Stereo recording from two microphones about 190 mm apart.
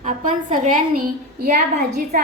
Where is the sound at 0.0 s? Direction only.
45° right (ahead or behind).